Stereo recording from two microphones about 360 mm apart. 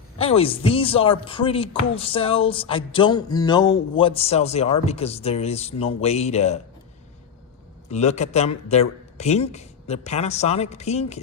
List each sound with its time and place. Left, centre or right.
0.2 s speech: centre
7.9 s speech: centre